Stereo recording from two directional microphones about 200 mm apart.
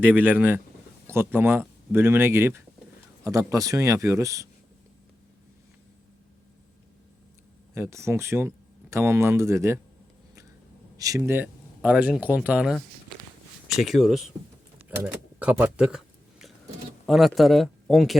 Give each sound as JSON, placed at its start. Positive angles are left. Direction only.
{"t": 0.0, "sound": "speech", "side_deg": -10}
{"t": 7.7, "sound": "speech", "side_deg": -15}
{"t": 10.9, "sound": "speech", "side_deg": -15}
{"t": 14.8, "sound": "a sound", "side_deg": -5}
{"t": 17.1, "sound": "speech", "side_deg": 0}